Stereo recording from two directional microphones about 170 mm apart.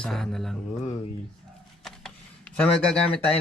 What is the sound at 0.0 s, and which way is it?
Mantra, centre (ahead or behind).